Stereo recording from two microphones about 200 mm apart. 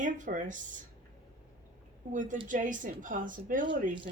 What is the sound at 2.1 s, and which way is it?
Speech, 40° right (ahead or behind).